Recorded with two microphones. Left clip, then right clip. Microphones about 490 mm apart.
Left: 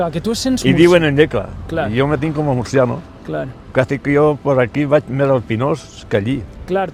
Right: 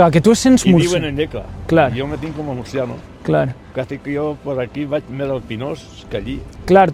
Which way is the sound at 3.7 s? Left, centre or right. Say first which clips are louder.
Left 9 dB; left.